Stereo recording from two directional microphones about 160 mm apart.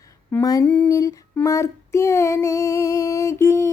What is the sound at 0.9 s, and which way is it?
Child singing, 20° left (ahead or behind).